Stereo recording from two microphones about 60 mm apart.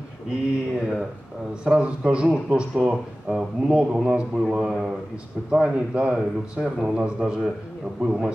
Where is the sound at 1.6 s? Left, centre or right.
Centre.